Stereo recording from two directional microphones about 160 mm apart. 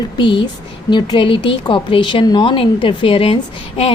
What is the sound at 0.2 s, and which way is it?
A woman's voice, 30° left (ahead or behind).